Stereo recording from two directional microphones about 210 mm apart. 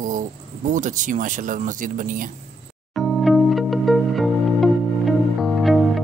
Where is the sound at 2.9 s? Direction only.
Centre (ahead or behind).